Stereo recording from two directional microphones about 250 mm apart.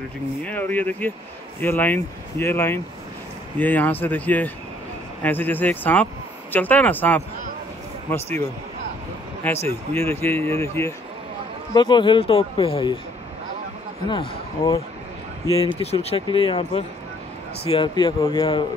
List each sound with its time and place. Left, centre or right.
0.5 s speech: centre
9.4 s speech: centre
14.0 s speech: centre
15.8 s speech: left